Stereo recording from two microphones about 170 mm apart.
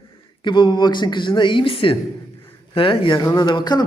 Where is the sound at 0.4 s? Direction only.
30° left (ahead or behind).